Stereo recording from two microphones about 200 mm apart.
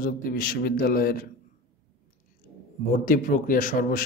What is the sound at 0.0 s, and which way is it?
A man's voice, 45° left (ahead or behind).